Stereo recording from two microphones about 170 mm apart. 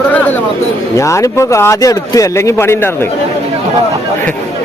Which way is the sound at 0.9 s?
20° left (ahead or behind).